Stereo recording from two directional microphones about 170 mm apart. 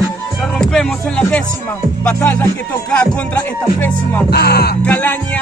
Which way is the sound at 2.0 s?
10° left (ahead or behind).